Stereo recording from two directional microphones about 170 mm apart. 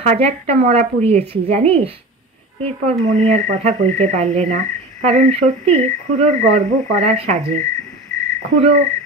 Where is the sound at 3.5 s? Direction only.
40° right (ahead or behind).